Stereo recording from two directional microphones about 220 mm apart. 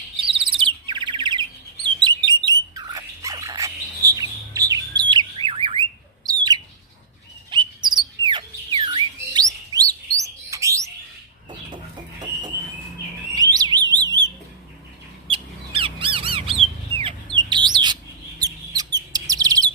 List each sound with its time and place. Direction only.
0.3 s bird: 25° right (ahead or behind)
11.7 s chicken: 20° right (ahead or behind)
13.3 s alarm: 15° right (ahead or behind)
13.9 s bird: 20° right (ahead or behind)
15.3 s squawk: 25° right (ahead or behind)
17.3 s bird: 20° right (ahead or behind)
19.1 s chirp: 15° right (ahead or behind)